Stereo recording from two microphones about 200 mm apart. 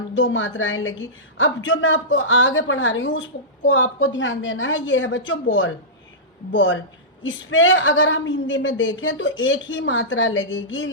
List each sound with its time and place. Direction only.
0.2 s a woman's voice: 70° left (ahead or behind)
7.2 s a woman's voice: 80° left